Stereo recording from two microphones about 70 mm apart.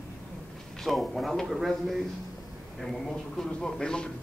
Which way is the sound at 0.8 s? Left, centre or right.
Centre.